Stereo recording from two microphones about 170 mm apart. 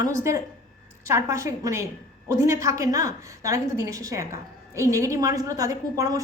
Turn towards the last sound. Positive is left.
turn(degrees=-20)  # may be behind; listen again after turning